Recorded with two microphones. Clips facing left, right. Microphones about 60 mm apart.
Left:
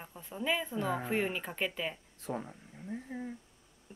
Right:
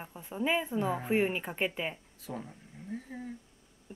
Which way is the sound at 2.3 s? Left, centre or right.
Left.